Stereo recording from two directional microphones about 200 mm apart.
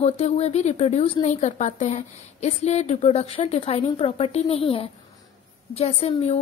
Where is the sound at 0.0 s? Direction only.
35° left (ahead or behind).